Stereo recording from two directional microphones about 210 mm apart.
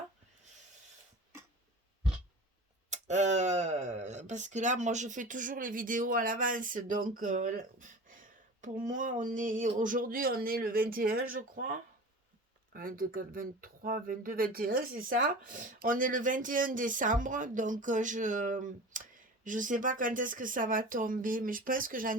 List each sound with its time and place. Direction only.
2.9 s speech: 35° right (ahead or behind)